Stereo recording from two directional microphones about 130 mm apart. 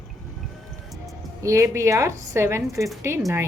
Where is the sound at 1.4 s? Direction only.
20° right (ahead or behind).